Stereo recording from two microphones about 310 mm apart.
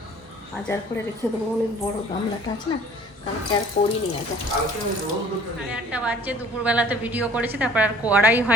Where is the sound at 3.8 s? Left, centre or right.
Left.